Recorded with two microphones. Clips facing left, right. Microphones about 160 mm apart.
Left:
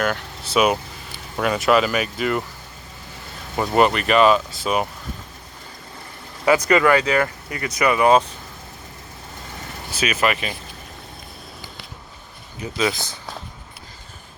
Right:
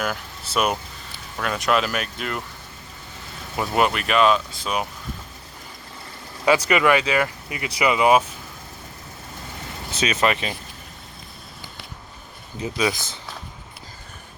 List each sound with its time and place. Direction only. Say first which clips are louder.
0.0 s speech: left 4 dB; 5° right (ahead or behind)
3.8 s speech: left 4 dB; centre (ahead or behind)
6.5 s speech: left 2 dB; 20° right (ahead or behind)
9.9 s speech: even; 30° right (ahead or behind)
12.6 s speech: left 1 dB; 15° right (ahead or behind)